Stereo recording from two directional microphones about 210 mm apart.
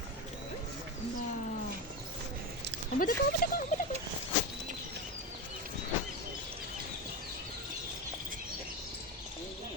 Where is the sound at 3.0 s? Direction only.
45° left (ahead or behind).